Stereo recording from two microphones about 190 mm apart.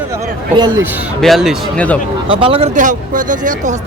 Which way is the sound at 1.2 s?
Centre (ahead or behind).